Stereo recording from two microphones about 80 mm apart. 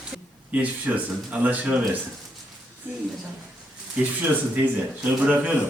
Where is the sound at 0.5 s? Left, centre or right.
Centre.